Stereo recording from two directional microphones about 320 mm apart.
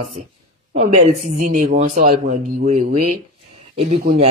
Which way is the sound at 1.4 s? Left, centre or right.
Right.